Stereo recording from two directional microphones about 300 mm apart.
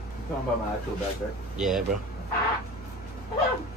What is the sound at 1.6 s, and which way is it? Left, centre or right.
Speech, centre.